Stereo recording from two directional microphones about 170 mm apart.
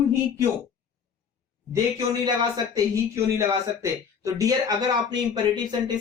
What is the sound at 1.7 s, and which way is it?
Speech, 20° right (ahead or behind).